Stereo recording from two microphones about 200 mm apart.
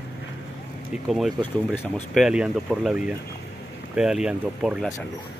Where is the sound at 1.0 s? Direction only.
Centre (ahead or behind).